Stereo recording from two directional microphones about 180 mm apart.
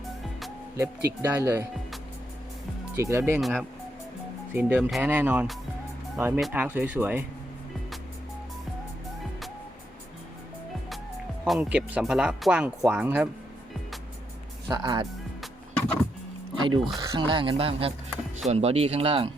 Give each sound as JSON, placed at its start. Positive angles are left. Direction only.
{"t": 0.8, "sound": "speech", "side_deg": -10}
{"t": 2.9, "sound": "speech", "side_deg": -15}
{"t": 4.8, "sound": "speech", "side_deg": 0}
{"t": 5.0, "sound": "speech", "side_deg": -10}
{"t": 11.4, "sound": "speech", "side_deg": -5}
{"t": 14.7, "sound": "speech", "side_deg": -25}
{"t": 16.6, "sound": "speech", "side_deg": -30}